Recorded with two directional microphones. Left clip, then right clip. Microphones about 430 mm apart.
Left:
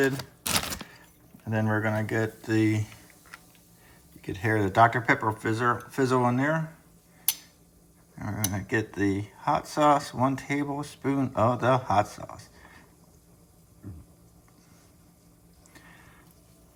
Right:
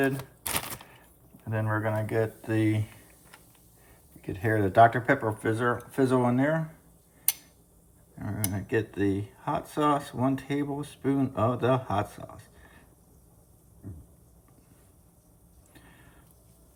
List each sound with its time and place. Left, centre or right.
1.5 s speech: centre
4.2 s speech: centre
8.1 s speech: centre
15.7 s a sound: centre